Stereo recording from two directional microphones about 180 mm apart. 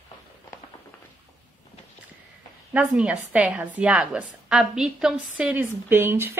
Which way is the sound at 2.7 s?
10° right (ahead or behind).